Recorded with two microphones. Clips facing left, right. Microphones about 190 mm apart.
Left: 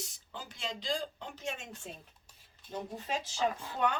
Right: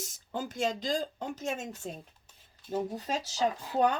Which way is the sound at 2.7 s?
40° right (ahead or behind).